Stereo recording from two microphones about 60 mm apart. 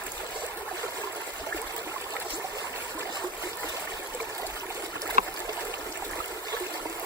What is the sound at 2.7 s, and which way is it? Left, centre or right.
Trickle, right.